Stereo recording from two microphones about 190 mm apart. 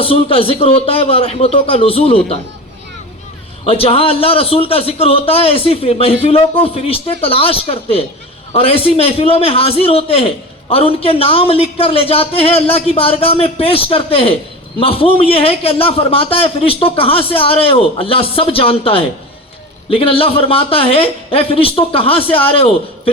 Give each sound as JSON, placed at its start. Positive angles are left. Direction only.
{"t": 0.0, "sound": "a man's voice", "side_deg": 30}
{"t": 3.7, "sound": "a man's voice", "side_deg": 30}